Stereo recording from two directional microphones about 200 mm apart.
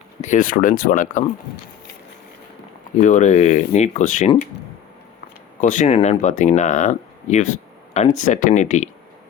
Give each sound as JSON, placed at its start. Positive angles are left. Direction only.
{"t": 0.2, "sound": "speech", "side_deg": 40}
{"t": 3.0, "sound": "speech", "side_deg": 35}
{"t": 5.5, "sound": "speech", "side_deg": 35}